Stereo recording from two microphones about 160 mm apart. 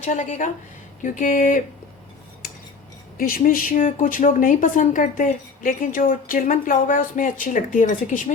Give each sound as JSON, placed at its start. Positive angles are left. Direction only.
{"t": 0.0, "sound": "a woman's voice", "side_deg": 50}
{"t": 3.2, "sound": "speech", "side_deg": 65}